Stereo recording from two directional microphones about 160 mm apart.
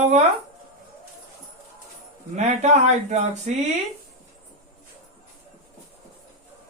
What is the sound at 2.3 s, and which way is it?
Speech, 45° right (ahead or behind).